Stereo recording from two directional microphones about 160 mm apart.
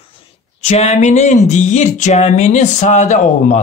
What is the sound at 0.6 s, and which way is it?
Speech, 45° left (ahead or behind).